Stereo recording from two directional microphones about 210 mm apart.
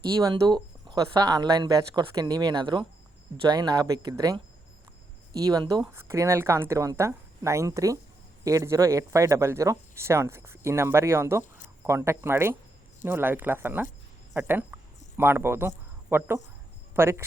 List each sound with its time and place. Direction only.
0.0 s speech: 20° right (ahead or behind)